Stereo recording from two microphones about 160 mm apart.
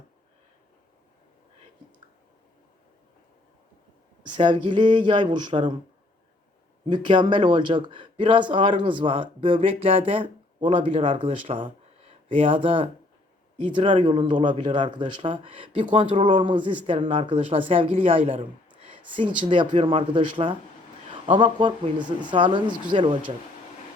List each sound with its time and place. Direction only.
4.2 s speech: 30° right (ahead or behind)
6.8 s speech: 30° right (ahead or behind)
19.4 s speech: 30° right (ahead or behind)